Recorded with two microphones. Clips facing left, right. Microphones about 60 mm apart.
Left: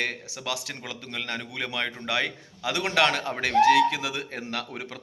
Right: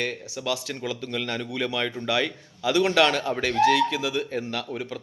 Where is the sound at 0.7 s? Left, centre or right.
Left.